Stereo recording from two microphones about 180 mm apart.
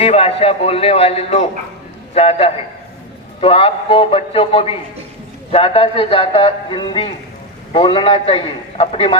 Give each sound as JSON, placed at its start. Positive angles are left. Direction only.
{"t": 0.0, "sound": "a man's voice", "side_deg": 35}